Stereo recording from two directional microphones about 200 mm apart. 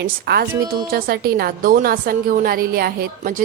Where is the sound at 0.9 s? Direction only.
50° right (ahead or behind).